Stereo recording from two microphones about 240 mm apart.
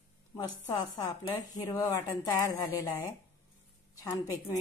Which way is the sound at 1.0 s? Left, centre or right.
Centre.